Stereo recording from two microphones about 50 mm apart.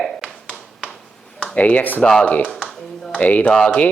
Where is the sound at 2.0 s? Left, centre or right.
Left.